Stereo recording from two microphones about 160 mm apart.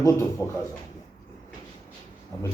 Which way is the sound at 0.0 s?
20° left (ahead or behind).